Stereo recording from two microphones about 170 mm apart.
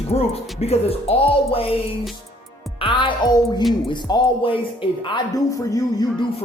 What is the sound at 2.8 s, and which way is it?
Speech, 30° left (ahead or behind).